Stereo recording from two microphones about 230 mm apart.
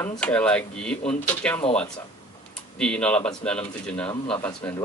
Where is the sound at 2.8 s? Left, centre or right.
Centre.